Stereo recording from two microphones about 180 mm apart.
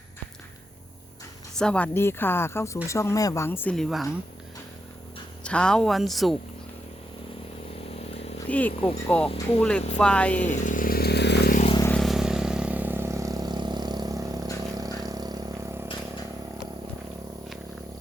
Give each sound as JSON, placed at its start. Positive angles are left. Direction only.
{"t": 1.5, "sound": "speech", "side_deg": 5}
{"t": 5.4, "sound": "speech", "side_deg": 5}
{"t": 8.4, "sound": "speech", "side_deg": 10}
{"t": 10.5, "sound": "chainsaw", "side_deg": 45}
{"t": 11.9, "sound": "vehicle", "side_deg": 0}
{"t": 14.6, "sound": "a sound", "side_deg": -20}